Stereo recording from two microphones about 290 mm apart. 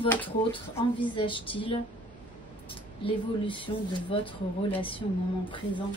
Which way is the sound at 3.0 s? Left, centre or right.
Centre.